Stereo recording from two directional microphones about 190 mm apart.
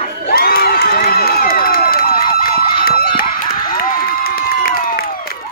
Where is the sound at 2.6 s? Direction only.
25° left (ahead or behind).